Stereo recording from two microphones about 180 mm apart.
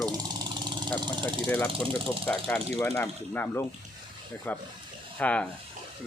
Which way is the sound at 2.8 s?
15° left (ahead or behind).